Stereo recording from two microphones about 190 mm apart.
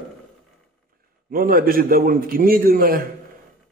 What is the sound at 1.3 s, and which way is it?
A man's voice, 50° right (ahead or behind).